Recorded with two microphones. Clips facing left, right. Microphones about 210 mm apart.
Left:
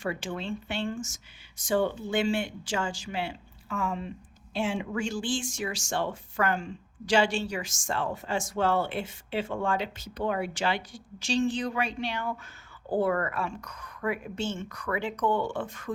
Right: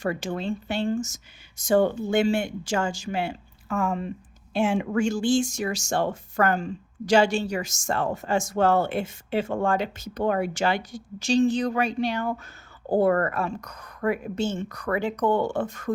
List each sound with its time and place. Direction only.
0.0 s a woman's voice: 40° right (ahead or behind)